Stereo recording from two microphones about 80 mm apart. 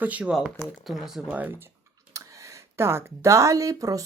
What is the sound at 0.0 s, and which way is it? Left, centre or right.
Speech, centre.